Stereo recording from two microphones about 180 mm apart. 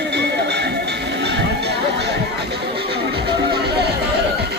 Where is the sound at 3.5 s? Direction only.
65° right (ahead or behind).